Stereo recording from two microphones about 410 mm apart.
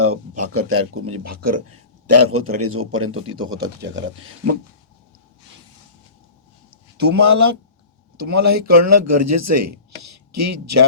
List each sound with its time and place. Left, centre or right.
0.0 s speech: right
7.1 s speech: right